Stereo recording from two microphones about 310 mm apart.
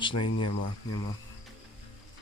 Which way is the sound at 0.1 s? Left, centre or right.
Left.